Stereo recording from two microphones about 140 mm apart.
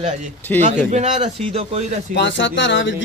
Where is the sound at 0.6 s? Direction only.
55° right (ahead or behind).